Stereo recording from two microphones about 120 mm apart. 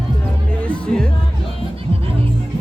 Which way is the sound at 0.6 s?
10° left (ahead or behind).